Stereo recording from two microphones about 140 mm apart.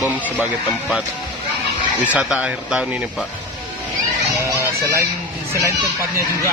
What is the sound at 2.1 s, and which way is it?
Speech, 5° right (ahead or behind).